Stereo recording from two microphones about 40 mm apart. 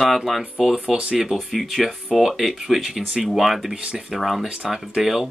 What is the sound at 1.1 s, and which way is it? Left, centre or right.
Speech, centre.